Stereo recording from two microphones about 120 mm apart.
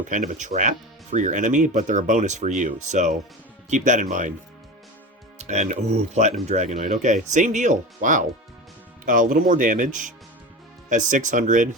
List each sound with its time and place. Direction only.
0.0 s speech: 90° right
5.4 s speech: 80° right